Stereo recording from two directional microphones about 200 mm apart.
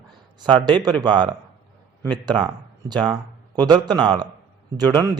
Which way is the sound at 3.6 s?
20° right (ahead or behind).